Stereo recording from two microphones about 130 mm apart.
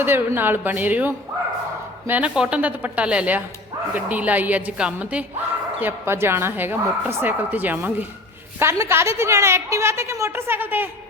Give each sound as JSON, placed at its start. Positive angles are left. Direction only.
{"t": 0.0, "sound": "a woman's voice", "side_deg": -15}